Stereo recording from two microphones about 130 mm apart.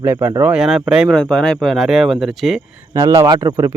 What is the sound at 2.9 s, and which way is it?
Speech, 25° right (ahead or behind).